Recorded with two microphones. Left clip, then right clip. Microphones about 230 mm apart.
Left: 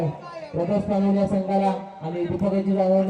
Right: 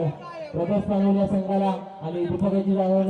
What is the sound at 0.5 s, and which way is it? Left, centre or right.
A man's voice, left.